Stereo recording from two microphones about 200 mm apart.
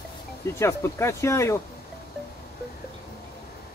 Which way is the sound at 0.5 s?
15° left (ahead or behind).